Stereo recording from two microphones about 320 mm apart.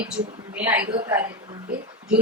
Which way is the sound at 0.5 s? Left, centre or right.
Centre.